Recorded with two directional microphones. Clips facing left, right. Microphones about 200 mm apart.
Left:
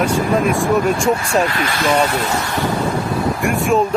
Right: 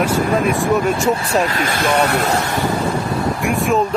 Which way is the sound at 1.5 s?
50° right (ahead or behind).